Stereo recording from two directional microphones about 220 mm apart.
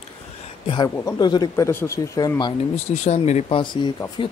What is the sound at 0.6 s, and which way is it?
Speech, 20° left (ahead or behind).